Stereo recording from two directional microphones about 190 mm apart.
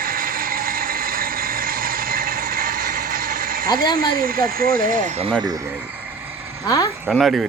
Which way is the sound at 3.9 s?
50° right (ahead or behind).